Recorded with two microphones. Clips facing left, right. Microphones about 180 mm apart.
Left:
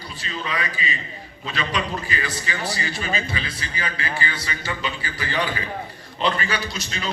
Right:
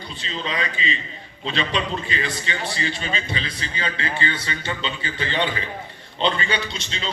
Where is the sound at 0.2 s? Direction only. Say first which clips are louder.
Right 1 dB; 25° right (ahead or behind).